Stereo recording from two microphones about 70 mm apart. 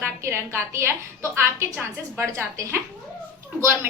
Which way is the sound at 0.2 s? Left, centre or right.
Right.